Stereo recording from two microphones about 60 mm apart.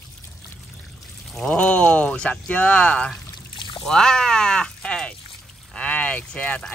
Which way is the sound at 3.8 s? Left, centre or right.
Centre.